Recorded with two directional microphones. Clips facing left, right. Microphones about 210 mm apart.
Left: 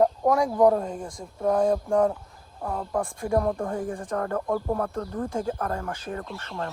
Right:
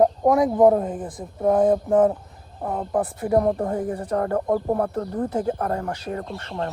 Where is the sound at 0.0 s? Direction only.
20° right (ahead or behind).